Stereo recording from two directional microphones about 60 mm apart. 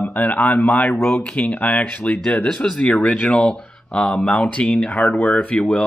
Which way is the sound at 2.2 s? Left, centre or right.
Centre.